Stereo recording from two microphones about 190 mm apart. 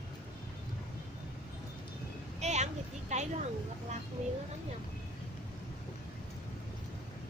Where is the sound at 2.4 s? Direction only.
35° right (ahead or behind).